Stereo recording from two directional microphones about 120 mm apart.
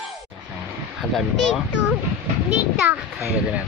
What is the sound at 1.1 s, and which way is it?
Speech, centre (ahead or behind).